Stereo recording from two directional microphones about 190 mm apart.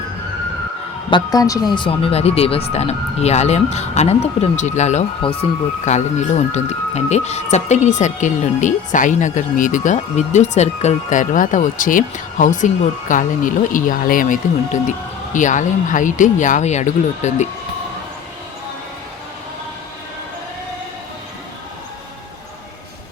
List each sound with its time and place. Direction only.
1.1 s speech: 20° left (ahead or behind); by 17.5 s 40° left (ahead or behind)